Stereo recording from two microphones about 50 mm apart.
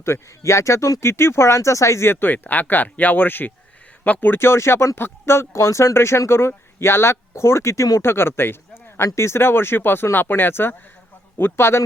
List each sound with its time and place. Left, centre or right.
0.0 s speech: left
2.2 s speech: left
4.4 s speech: left
8.0 s speech: left